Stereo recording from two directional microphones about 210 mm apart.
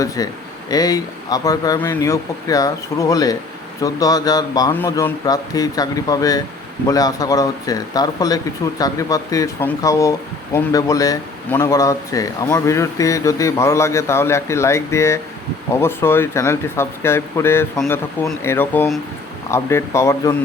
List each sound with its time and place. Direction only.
0.2 s speech: 20° left (ahead or behind)